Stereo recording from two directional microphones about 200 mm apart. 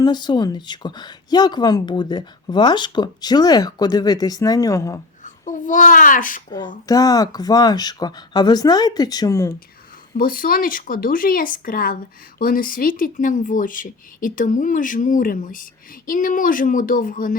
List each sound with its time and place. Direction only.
0.0 s speech: 20° left (ahead or behind)
5.2 s a child's voice: 40° left (ahead or behind)
6.8 s speech: 15° left (ahead or behind)
10.2 s speech: 45° left (ahead or behind)